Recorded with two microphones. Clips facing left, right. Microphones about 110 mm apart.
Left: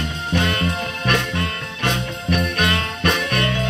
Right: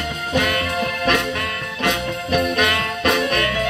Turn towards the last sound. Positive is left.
turn(degrees=30)  # may be behind; listen again after turning